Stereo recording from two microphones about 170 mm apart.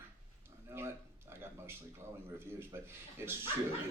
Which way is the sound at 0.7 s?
15° right (ahead or behind).